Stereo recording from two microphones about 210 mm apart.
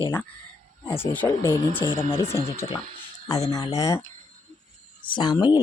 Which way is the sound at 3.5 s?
15° left (ahead or behind).